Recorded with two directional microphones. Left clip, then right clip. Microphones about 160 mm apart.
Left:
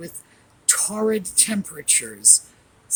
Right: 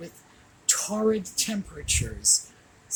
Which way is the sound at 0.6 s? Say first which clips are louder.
Left 3 dB; 45° left (ahead or behind).